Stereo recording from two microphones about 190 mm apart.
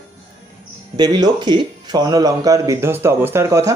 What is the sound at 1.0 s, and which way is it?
Speech, 20° right (ahead or behind).